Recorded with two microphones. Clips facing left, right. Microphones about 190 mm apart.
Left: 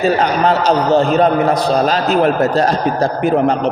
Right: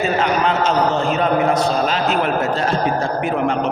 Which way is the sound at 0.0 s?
40° left (ahead or behind).